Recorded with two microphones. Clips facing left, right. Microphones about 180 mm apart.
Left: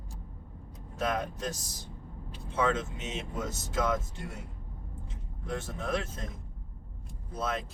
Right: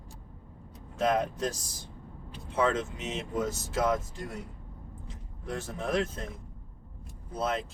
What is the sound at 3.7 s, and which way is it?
Speech, 30° right (ahead or behind).